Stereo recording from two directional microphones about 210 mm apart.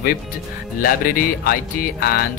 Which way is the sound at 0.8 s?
45° left (ahead or behind).